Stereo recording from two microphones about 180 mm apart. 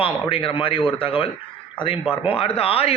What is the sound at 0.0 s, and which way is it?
A man's voice, 30° left (ahead or behind).